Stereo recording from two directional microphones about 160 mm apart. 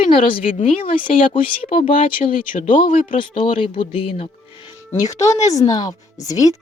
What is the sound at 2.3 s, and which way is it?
Speech, 55° left (ahead or behind).